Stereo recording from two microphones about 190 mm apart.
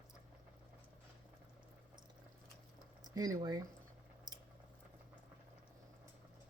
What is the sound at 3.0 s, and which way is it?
Speech, 20° right (ahead or behind).